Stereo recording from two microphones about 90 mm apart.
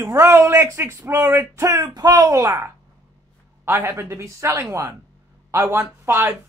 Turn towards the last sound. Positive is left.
turn(degrees=-30)  # may be behind; listen again after turning